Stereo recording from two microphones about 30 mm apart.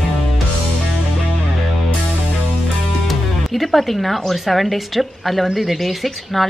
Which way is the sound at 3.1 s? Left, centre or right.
Centre.